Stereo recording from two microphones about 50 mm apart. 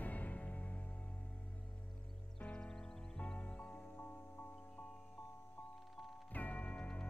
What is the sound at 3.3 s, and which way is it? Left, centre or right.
Music, left.